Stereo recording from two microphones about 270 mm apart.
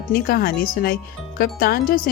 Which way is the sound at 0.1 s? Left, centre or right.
Left.